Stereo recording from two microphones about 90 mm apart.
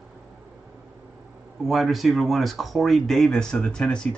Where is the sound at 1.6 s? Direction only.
Centre (ahead or behind).